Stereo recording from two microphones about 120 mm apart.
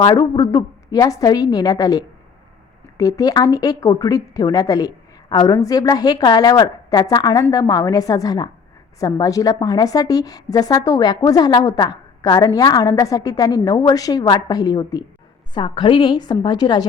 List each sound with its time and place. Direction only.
0.0 s a woman's voice: 35° left (ahead or behind)